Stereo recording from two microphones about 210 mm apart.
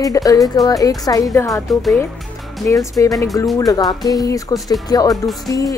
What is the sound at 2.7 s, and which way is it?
A woman's voice, 15° left (ahead or behind).